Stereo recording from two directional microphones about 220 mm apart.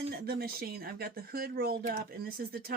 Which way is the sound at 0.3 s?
40° right (ahead or behind).